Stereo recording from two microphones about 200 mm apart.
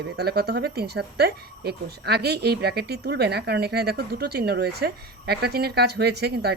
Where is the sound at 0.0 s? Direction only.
55° right (ahead or behind).